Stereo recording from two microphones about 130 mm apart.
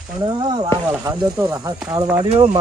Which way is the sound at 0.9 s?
20° right (ahead or behind).